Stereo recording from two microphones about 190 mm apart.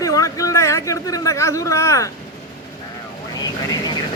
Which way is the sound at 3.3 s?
20° left (ahead or behind).